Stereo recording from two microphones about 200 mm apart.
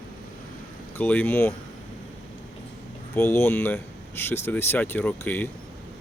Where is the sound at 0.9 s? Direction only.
10° left (ahead or behind).